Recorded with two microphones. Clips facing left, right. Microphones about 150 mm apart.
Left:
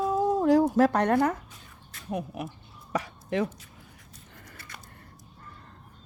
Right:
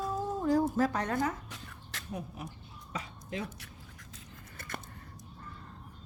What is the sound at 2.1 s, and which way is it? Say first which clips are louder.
Speech: left 8 dB; 75° left (ahead or behind).